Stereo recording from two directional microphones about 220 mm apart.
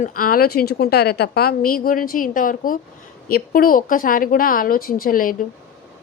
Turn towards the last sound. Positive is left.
turn(degrees=40)  # may be behind; listen again after turning